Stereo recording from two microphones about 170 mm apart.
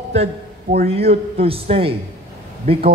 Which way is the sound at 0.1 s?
40° right (ahead or behind).